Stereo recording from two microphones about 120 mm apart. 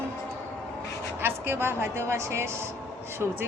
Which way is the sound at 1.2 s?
20° right (ahead or behind).